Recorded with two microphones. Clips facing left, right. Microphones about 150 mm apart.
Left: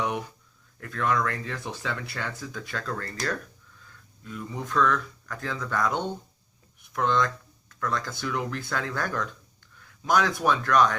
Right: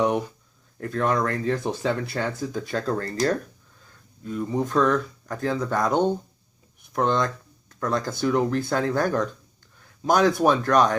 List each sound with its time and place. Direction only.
0.8 s speech: 35° right (ahead or behind)